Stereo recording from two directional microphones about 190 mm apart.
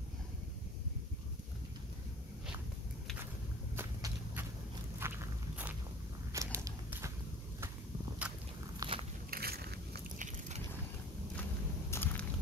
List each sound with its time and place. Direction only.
3.7 s walk: 10° right (ahead or behind)
8.7 s biting: 30° right (ahead or behind)
9.3 s biting: 55° right (ahead or behind)
11.9 s a sound: 10° left (ahead or behind)